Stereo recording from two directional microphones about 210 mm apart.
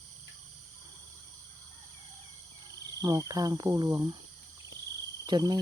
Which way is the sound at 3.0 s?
15° right (ahead or behind).